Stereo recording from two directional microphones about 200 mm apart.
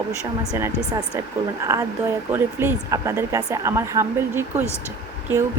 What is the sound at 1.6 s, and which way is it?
Speech, 15° right (ahead or behind).